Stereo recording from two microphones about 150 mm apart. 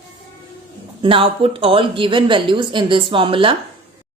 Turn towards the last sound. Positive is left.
turn(degrees=-35)  # may be behind; listen again after turning